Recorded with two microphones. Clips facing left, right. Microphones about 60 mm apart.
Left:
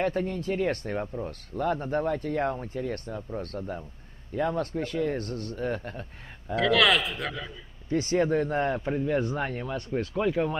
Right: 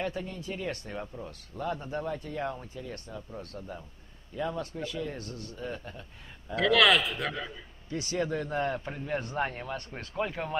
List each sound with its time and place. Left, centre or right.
0.0 s speech: left
6.5 s speech: centre
7.9 s speech: left
8.6 s speech: centre
9.4 s speech: centre